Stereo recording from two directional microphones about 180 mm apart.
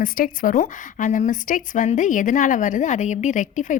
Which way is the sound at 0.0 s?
50° left (ahead or behind).